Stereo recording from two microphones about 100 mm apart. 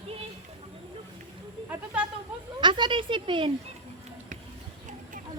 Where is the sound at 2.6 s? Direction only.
55° right (ahead or behind).